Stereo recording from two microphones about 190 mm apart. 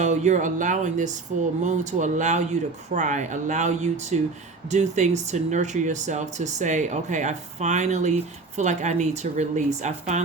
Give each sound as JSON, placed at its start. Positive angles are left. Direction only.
{"t": 0.0, "sound": "speech", "side_deg": -35}